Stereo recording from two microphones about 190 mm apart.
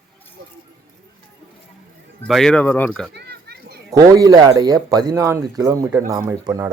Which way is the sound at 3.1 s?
60° right (ahead or behind).